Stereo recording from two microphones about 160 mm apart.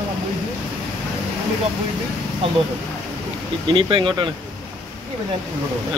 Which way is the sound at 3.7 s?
30° right (ahead or behind).